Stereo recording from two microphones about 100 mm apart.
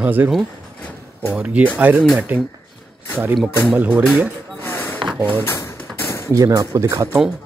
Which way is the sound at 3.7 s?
10° right (ahead or behind).